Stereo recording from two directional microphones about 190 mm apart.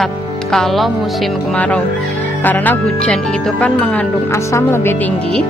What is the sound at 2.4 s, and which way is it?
Speech, 10° left (ahead or behind).